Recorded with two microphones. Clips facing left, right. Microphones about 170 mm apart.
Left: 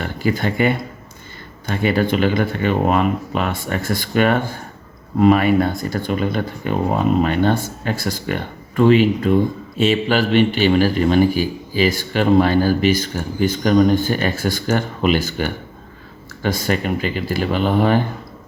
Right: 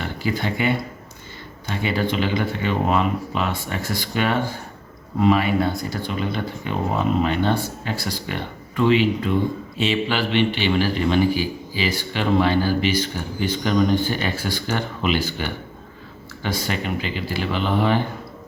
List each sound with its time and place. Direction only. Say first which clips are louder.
0.0 s speech: left 4 dB; 50° left (ahead or behind)